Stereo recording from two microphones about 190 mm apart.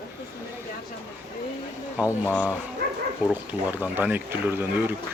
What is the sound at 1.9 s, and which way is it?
Speech, 10° left (ahead or behind).